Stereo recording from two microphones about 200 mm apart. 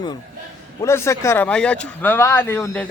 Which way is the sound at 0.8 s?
15° left (ahead or behind).